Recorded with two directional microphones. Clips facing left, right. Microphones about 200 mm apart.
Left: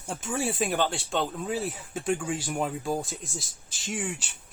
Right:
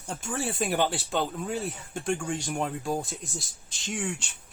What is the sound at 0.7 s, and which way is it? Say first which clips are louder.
Speech: right 1 dB; 5° right (ahead or behind).